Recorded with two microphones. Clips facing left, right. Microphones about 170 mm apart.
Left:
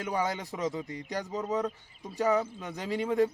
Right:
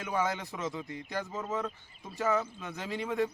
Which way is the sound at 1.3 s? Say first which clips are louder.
Left 8 dB; 15° left (ahead or behind).